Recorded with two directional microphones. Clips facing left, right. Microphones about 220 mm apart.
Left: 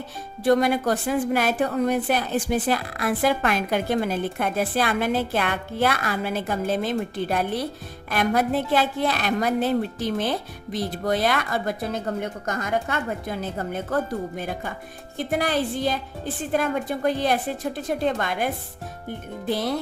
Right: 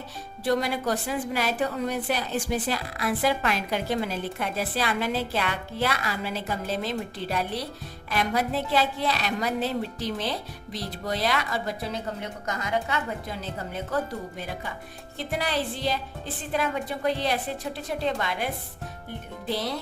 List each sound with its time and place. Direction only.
0.4 s a woman's voice: 50° left (ahead or behind)